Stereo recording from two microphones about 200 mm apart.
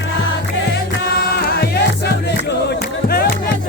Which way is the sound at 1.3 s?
50° left (ahead or behind).